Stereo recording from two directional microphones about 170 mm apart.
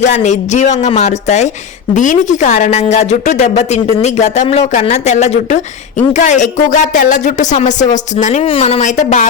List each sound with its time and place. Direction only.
0.0 s speech: 45° left (ahead or behind)